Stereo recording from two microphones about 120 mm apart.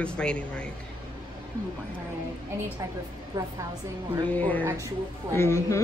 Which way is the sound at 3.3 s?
35° right (ahead or behind).